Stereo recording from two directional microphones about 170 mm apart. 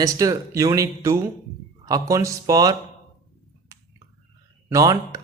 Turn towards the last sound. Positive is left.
turn(degrees=-20)  # may be behind; listen again after turning